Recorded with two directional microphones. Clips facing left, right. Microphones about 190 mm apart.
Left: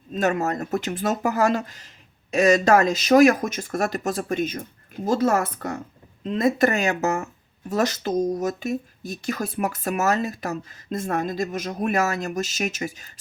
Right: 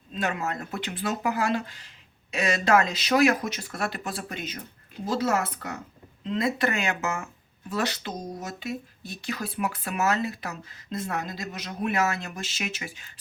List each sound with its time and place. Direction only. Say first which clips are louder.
0.1 s speech: left 7 dB; 45° left (ahead or behind)